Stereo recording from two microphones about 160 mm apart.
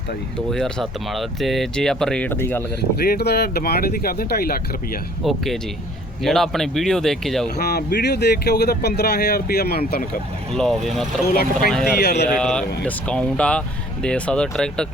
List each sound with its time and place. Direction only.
0.5 s speech: centre (ahead or behind)
3.0 s speech: 80° left
6.2 s speech: centre (ahead or behind)
7.5 s speech: 80° left
10.5 s speech: centre (ahead or behind)
11.3 s speech: 65° left (ahead or behind)
11.9 s speech: 90° left
12.3 s speech: 5° left (ahead or behind)